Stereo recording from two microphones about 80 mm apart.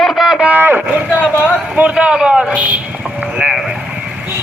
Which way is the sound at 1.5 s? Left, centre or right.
Centre.